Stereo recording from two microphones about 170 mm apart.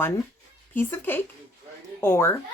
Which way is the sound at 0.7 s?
10° left (ahead or behind).